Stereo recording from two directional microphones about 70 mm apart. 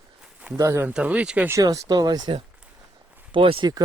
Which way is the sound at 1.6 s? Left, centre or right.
Right.